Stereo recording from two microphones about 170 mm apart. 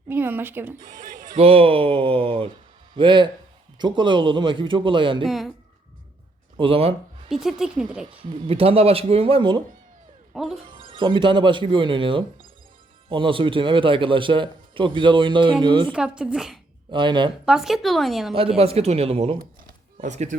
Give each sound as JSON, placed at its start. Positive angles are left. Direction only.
{"t": 0.1, "sound": "speech", "side_deg": -10}
{"t": 0.8, "sound": "speech", "side_deg": -50}
{"t": 1.4, "sound": "a man's voice", "side_deg": -35}
{"t": 5.2, "sound": "a woman's voice", "side_deg": 0}
{"t": 6.6, "sound": "speech", "side_deg": -35}
{"t": 7.3, "sound": "a woman's voice", "side_deg": -5}
{"t": 8.0, "sound": "speech", "side_deg": -30}
{"t": 10.3, "sound": "speech", "side_deg": 0}
{"t": 10.8, "sound": "a man's voice", "side_deg": -30}
{"t": 15.9, "sound": "a woman's voice", "side_deg": -5}
{"t": 16.9, "sound": "a man's voice", "side_deg": -30}
{"t": 17.4, "sound": "a woman's voice", "side_deg": -5}
{"t": 18.3, "sound": "speech", "side_deg": -35}
{"t": 19.4, "sound": "a sound", "side_deg": -50}